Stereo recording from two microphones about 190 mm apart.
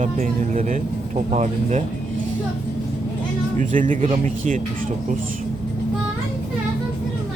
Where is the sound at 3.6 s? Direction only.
45° right (ahead or behind).